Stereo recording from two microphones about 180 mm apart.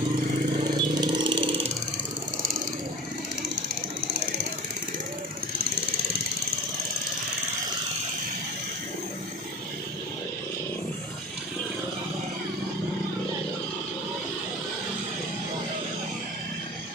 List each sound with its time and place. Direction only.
0.8 s vehicle: 25° right (ahead or behind)